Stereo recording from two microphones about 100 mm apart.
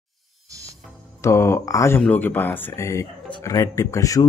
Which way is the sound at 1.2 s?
25° left (ahead or behind).